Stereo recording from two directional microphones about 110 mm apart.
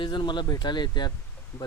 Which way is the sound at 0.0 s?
45° left (ahead or behind).